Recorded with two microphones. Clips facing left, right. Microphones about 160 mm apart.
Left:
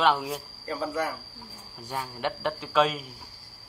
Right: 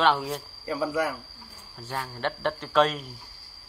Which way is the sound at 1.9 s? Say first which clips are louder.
Even; 10° left (ahead or behind).